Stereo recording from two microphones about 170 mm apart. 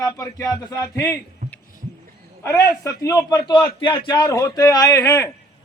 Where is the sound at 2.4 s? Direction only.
15° left (ahead or behind).